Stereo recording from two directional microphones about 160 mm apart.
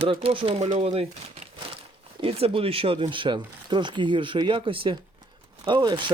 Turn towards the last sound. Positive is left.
turn(degrees=-30)  # may be behind; listen again after turning